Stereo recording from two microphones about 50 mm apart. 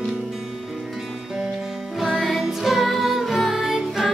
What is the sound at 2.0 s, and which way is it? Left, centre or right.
Music, centre.